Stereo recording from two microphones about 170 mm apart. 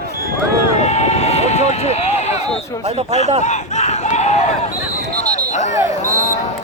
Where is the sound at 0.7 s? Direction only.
40° left (ahead or behind).